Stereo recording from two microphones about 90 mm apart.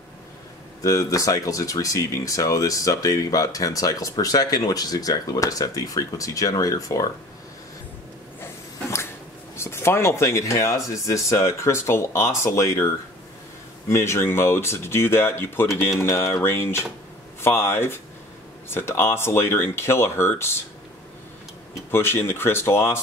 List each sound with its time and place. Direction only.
0.8 s speech: 40° left (ahead or behind)
9.6 s speech: 30° left (ahead or behind)
13.8 s speech: 30° left (ahead or behind)
21.9 s speech: 25° left (ahead or behind)